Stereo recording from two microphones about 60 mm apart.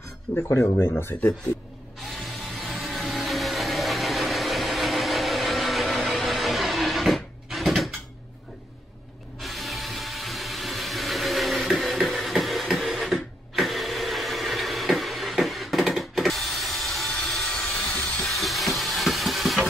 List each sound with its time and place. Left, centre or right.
0.4 s speech: left
2.1 s vehicle: centre
9.4 s a sound: centre
18.2 s vehicle: centre